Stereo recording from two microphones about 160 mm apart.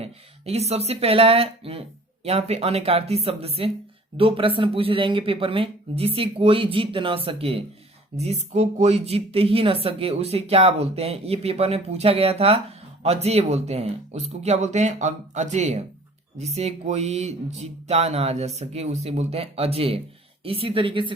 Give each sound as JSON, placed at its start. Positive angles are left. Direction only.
{"t": 0.0, "sound": "speech", "side_deg": -40}